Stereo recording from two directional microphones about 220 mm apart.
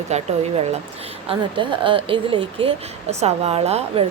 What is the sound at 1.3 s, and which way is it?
Speech, 20° right (ahead or behind).